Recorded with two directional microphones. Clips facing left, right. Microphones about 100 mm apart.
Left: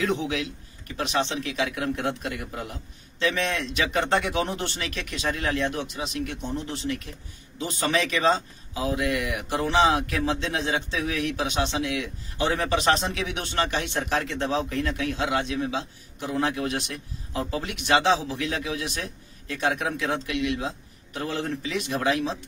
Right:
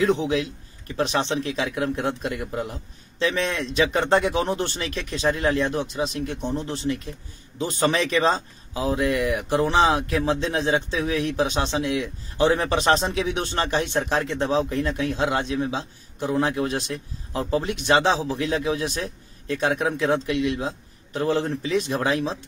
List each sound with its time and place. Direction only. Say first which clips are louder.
0.0 s a man's voice: right 5 dB; 25° right (ahead or behind)